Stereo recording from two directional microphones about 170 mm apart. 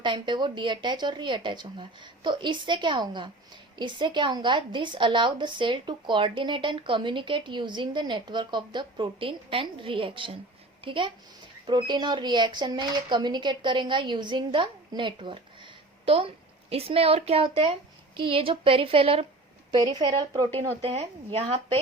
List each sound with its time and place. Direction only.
0.0 s a woman's voice: 25° right (ahead or behind)
20.6 s a woman's voice: 35° right (ahead or behind)